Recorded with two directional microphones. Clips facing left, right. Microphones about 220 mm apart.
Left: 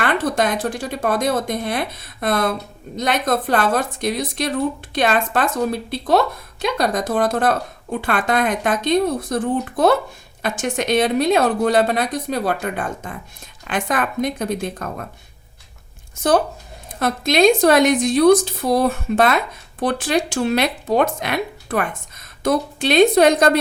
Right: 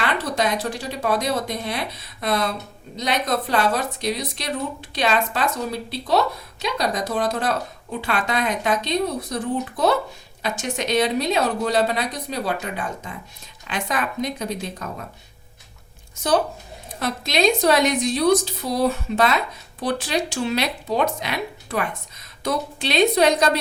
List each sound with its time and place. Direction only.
0.0 s a woman's voice: 50° left (ahead or behind)
17.0 s a woman's voice: 50° left (ahead or behind)